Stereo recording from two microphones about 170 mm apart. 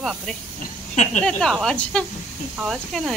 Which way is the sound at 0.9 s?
45° left (ahead or behind).